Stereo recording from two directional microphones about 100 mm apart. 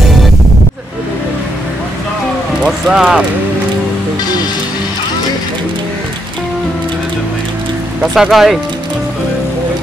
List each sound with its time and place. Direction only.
2.6 s speech: 5° right (ahead or behind)
8.0 s speech: 5° right (ahead or behind)